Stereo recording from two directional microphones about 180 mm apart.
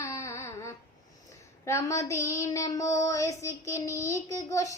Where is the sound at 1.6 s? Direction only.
15° left (ahead or behind).